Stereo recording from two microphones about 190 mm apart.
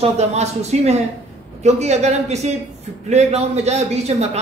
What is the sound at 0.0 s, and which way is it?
A man's voice, 35° right (ahead or behind).